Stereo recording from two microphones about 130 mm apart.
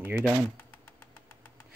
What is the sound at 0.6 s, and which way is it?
Bird, 15° left (ahead or behind).